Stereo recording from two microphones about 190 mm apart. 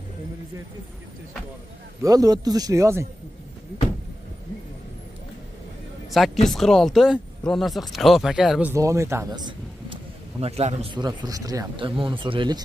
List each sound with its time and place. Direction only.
2.0 s speech: 20° right (ahead or behind)
6.0 s a sound: centre (ahead or behind)
6.4 s speech: centre (ahead or behind)
8.7 s speech: 15° right (ahead or behind)
10.4 s a man's voice: 35° right (ahead or behind)
11.0 s speech: 20° right (ahead or behind)